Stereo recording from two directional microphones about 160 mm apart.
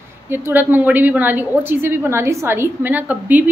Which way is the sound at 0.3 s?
15° right (ahead or behind).